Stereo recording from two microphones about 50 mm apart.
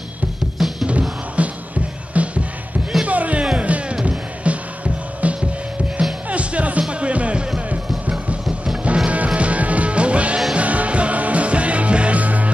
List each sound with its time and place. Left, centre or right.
0.6 s music: centre
1.4 s music: right
8.8 s music: right